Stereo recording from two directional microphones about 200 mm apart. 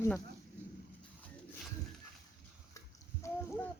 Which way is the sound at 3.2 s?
15° left (ahead or behind).